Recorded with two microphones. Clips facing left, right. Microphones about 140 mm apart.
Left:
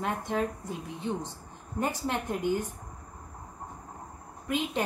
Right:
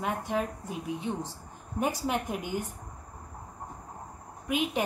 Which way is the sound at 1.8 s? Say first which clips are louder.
Right 1 dB; 10° right (ahead or behind).